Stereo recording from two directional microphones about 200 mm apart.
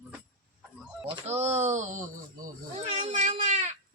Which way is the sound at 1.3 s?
35° right (ahead or behind).